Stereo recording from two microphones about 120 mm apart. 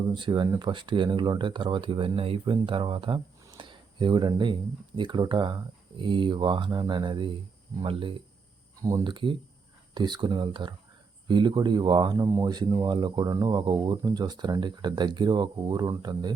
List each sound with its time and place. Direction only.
0.1 s speech: 40° right (ahead or behind)
3.6 s a sound: 40° right (ahead or behind)
4.9 s speech: 40° right (ahead or behind)
8.8 s speech: 30° right (ahead or behind)